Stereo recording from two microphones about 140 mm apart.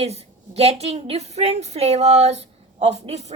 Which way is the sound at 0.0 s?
50° right (ahead or behind).